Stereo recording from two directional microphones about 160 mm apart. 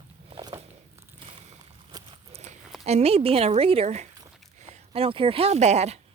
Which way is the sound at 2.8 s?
45° right (ahead or behind).